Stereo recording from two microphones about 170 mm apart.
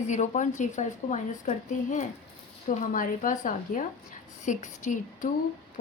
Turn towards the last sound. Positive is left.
turn(degrees=45)  # may be behind; listen again after turning